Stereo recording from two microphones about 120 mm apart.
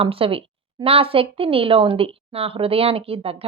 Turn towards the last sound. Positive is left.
turn(degrees=-50)  # may be behind; listen again after turning